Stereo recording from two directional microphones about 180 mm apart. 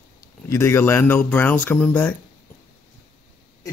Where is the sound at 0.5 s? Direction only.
15° left (ahead or behind).